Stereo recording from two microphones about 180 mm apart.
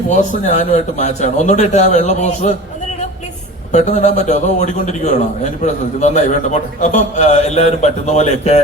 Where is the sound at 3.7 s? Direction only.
40° left (ahead or behind).